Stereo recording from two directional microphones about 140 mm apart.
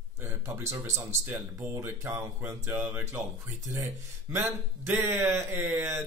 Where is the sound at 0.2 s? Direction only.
20° right (ahead or behind).